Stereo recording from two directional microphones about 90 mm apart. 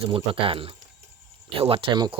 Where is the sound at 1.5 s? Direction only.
90° right; by 2.1 s 70° right (ahead or behind).